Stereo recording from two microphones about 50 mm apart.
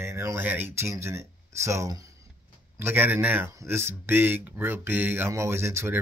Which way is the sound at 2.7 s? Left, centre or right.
Right.